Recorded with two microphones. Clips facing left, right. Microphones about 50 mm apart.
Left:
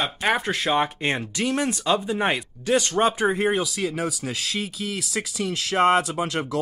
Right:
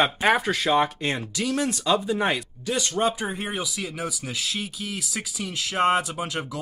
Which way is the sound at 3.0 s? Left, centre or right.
Left.